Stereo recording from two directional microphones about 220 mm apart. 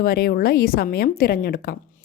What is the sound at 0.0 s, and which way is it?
A woman's voice, 40° left (ahead or behind).